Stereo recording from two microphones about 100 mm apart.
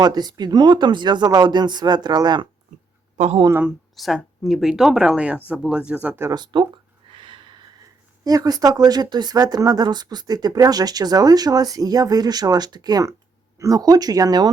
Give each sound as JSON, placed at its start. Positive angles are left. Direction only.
{"t": 0.0, "sound": "speech", "side_deg": -45}
{"t": 3.9, "sound": "speech", "side_deg": 0}
{"t": 6.3, "sound": "speech", "side_deg": -50}
{"t": 7.1, "sound": "sniff", "side_deg": -60}
{"t": 8.2, "sound": "speech", "side_deg": -40}